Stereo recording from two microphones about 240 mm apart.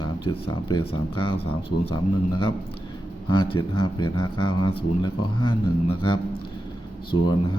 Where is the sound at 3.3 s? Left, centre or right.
Centre.